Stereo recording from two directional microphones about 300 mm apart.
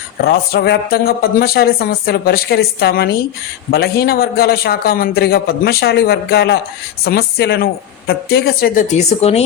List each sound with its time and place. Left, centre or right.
0.2 s a woman's voice: left